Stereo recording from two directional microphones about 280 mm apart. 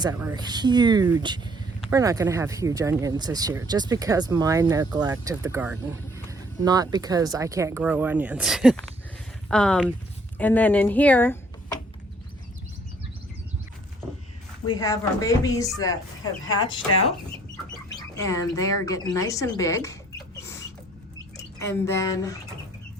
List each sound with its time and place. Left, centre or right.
0.0 s speech: centre
14.7 s speech: centre
17.8 s speech: centre
21.8 s speech: centre